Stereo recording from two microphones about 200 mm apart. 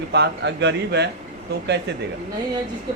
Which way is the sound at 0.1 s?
60° right (ahead or behind).